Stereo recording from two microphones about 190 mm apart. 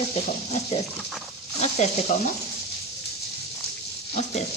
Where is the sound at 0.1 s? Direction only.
35° left (ahead or behind).